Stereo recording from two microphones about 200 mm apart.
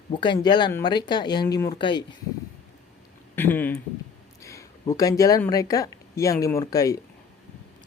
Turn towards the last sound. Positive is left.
turn(degrees=15)  # may be behind; listen again after turning